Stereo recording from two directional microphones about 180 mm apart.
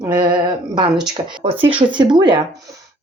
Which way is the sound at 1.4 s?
30° right (ahead or behind).